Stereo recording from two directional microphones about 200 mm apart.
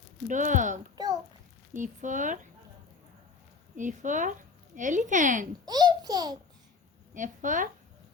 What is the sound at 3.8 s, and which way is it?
Speech, 40° right (ahead or behind).